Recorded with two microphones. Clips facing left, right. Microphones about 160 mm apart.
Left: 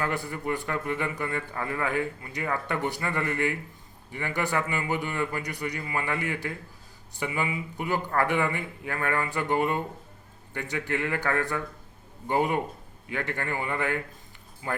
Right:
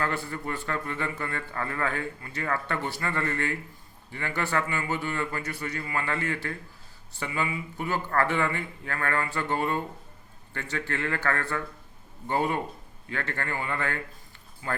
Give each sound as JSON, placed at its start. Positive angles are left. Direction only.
{"t": 0.0, "sound": "a man's voice", "side_deg": 15}